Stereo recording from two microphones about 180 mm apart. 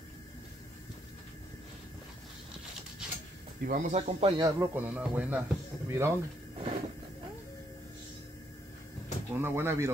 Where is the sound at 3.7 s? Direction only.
45° right (ahead or behind).